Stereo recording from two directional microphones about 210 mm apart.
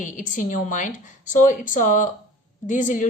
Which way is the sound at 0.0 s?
35° left (ahead or behind).